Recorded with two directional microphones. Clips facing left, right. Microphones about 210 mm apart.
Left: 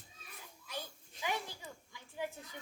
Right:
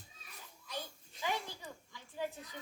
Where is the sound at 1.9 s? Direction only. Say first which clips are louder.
Right 1 dB; 15° left (ahead or behind).